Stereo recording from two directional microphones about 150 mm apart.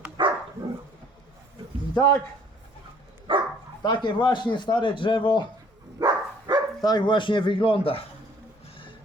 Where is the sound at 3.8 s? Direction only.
30° left (ahead or behind).